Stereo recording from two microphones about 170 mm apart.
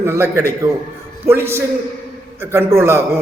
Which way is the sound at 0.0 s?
15° right (ahead or behind).